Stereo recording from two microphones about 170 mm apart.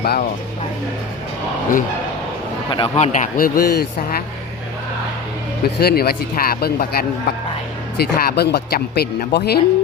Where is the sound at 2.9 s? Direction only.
45° left (ahead or behind); by 4.2 s 65° left (ahead or behind).